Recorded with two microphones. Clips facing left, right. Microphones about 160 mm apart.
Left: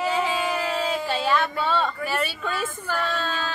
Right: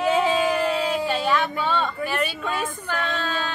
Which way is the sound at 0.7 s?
10° right (ahead or behind).